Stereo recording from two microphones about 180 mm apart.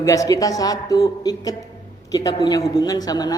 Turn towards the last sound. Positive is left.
turn(degrees=20)  # may be behind; listen again after turning